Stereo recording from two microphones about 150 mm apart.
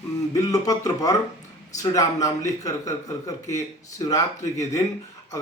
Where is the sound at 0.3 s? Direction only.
25° left (ahead or behind).